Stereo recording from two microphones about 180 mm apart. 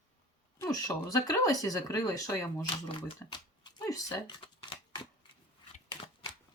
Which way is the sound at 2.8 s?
25° left (ahead or behind).